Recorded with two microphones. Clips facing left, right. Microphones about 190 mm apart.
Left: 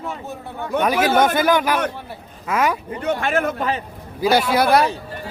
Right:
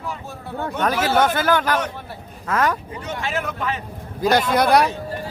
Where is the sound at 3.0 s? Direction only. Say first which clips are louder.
Left 7 dB; 55° left (ahead or behind); by 3.8 s 40° left (ahead or behind).